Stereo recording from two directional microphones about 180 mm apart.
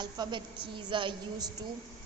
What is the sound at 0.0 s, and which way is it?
A woman's voice, 25° right (ahead or behind).